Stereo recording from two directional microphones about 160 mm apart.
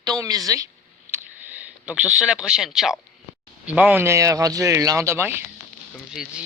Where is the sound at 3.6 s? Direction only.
10° right (ahead or behind).